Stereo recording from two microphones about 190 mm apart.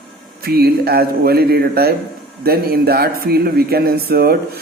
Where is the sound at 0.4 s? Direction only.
55° right (ahead or behind).